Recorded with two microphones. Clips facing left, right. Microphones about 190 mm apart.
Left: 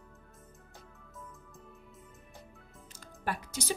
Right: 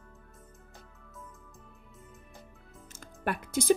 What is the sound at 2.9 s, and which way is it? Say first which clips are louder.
Music: right 3 dB; 55° right (ahead or behind).